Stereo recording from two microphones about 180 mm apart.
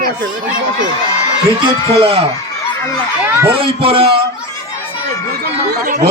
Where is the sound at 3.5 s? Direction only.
30° right (ahead or behind).